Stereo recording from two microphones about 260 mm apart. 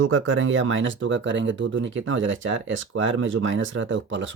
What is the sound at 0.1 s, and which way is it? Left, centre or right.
Speech, right.